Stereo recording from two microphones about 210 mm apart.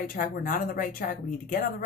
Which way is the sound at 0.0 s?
40° left (ahead or behind).